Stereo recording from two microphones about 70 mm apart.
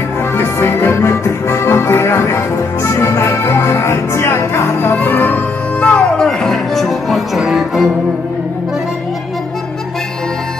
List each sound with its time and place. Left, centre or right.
0.4 s music: left
5.8 s music: centre